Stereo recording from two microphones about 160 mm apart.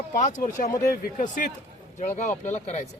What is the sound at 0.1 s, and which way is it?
Speech, 50° left (ahead or behind).